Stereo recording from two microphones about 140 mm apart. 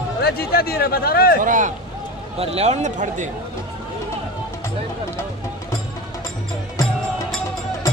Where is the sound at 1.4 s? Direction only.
70° right (ahead or behind).